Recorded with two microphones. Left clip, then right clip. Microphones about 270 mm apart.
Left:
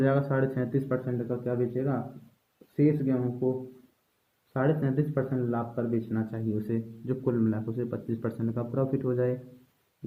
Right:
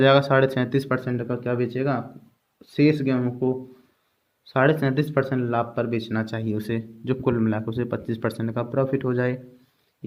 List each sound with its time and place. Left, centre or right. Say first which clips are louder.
0.0 s speech: right 10 dB; right
4.5 s speech: right 8 dB; right